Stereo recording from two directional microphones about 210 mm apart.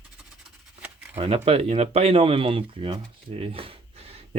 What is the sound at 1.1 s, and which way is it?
Speech, 25° right (ahead or behind).